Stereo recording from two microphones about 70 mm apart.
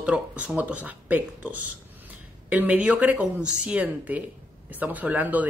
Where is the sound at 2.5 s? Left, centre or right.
Right.